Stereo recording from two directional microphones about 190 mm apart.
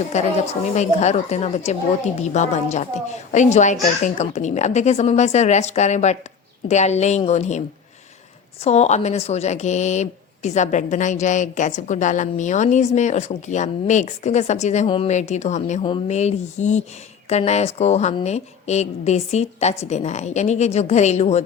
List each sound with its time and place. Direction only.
0.1 s speech: 35° left (ahead or behind)
8.6 s speech: 35° left (ahead or behind)